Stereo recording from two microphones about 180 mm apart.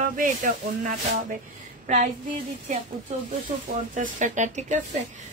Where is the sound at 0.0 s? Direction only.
50° right (ahead or behind).